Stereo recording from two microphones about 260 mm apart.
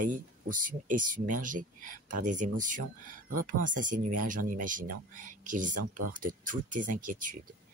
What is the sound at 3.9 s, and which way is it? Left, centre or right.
Speech, right.